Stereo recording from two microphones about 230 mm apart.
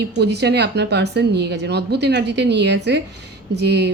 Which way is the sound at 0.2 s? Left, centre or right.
Right.